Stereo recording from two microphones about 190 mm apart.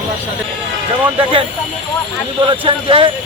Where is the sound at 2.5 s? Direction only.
25° right (ahead or behind).